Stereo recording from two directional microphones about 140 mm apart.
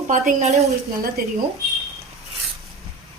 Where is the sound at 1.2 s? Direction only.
90° right.